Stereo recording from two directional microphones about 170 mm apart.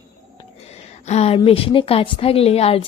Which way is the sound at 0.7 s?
40° left (ahead or behind).